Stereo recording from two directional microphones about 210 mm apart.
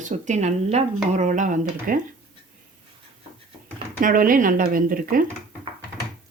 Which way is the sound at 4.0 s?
40° right (ahead or behind).